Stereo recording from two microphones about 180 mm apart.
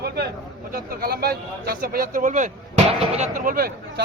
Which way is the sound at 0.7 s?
55° right (ahead or behind).